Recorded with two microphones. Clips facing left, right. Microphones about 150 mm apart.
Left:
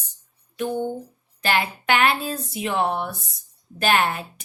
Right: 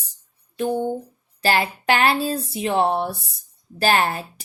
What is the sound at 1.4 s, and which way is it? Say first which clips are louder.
Speech: right 3 dB; 35° right (ahead or behind).